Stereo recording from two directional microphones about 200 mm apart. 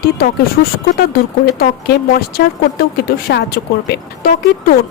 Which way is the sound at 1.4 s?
50° left (ahead or behind).